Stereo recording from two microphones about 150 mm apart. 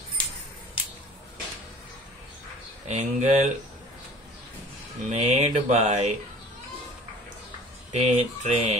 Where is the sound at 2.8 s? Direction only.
50° right (ahead or behind).